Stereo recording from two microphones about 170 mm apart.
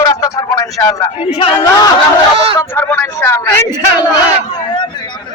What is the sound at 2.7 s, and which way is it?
Speech, 10° left (ahead or behind).